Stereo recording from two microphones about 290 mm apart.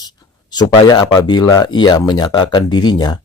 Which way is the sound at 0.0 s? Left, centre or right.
Centre.